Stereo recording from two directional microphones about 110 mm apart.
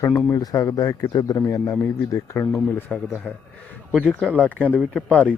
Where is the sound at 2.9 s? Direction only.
Centre (ahead or behind).